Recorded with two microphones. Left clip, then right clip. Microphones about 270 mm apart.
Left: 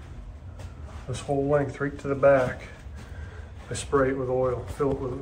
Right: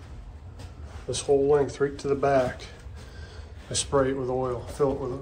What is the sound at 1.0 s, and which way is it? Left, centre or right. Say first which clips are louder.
A man's voice: right 5 dB; centre.